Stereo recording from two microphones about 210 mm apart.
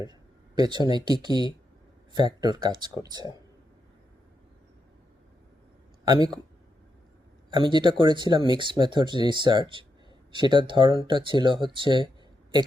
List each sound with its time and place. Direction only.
0.0 s speech: 20° right (ahead or behind)
6.1 s speech: 20° right (ahead or behind)
7.5 s speech: 20° right (ahead or behind)